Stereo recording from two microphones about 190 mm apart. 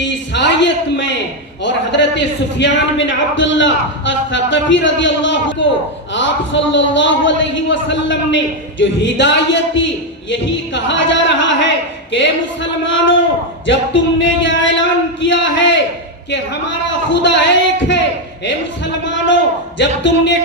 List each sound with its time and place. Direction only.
0.0 s a sound: 70° left (ahead or behind)
1.6 s a man's voice: 65° left (ahead or behind)
19.0 s a man's voice: 70° left (ahead or behind)